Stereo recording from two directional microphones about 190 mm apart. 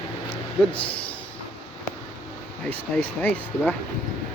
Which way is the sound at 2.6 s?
10° left (ahead or behind).